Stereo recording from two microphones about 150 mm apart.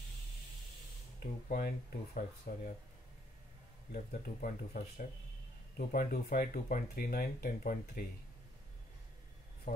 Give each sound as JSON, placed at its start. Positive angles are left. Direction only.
{"t": 1.2, "sound": "speech", "side_deg": 75}
{"t": 3.9, "sound": "speech", "side_deg": 65}
{"t": 5.8, "sound": "speech", "side_deg": 80}
{"t": 9.7, "sound": "a sound", "side_deg": 60}